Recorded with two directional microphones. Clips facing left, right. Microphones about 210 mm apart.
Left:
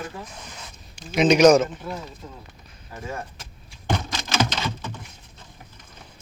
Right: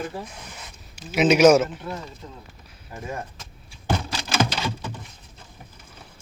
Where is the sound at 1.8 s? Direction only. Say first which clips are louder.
Even; 5° left (ahead or behind).